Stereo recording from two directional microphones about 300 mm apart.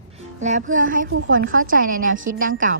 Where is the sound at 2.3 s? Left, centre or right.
Right.